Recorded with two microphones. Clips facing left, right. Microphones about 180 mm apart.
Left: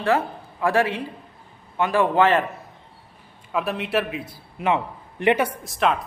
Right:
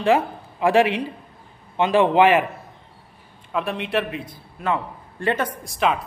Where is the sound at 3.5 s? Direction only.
Centre (ahead or behind).